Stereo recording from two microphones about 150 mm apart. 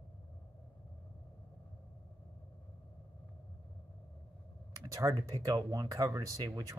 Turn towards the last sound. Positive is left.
turn(degrees=-25)  # may be behind; listen again after turning